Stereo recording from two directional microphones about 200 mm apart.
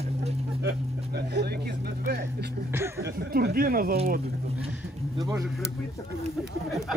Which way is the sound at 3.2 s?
50° right (ahead or behind).